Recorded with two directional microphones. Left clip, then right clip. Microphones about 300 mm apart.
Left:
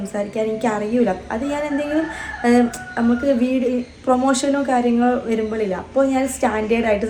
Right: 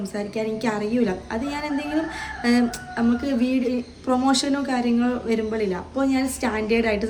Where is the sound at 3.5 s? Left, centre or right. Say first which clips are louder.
Left 4 dB; centre.